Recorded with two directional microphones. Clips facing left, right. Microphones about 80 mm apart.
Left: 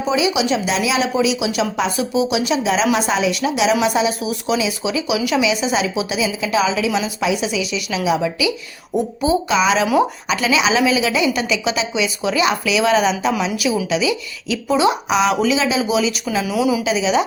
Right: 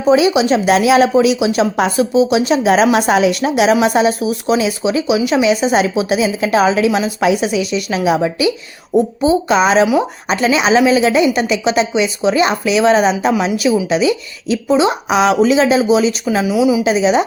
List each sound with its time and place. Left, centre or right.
0.1 s a woman's voice: right
5.4 s a woman's voice: right
9.0 s speech: right
9.5 s speech: right
16.4 s speech: centre
16.8 s speech: right